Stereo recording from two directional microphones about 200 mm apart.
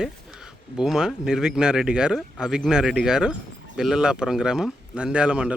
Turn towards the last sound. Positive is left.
turn(degrees=-5)  # may be behind; listen again after turning